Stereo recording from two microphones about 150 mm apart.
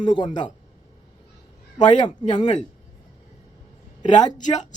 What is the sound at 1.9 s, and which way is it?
Speech, 30° left (ahead or behind).